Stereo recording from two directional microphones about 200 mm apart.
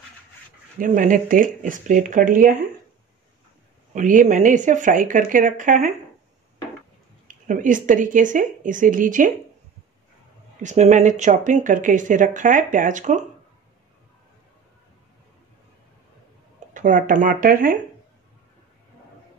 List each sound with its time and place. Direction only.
0.7 s speech: 40° right (ahead or behind)
3.9 s speech: 40° right (ahead or behind)
7.2 s speech: 40° right (ahead or behind)
10.6 s speech: 35° right (ahead or behind)
16.5 s speech: 40° right (ahead or behind)